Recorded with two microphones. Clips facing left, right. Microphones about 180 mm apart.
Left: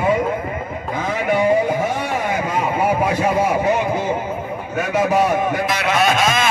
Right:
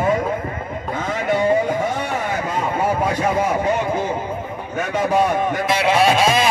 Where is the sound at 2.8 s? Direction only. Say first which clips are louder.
Left 1 dB; 10° left (ahead or behind).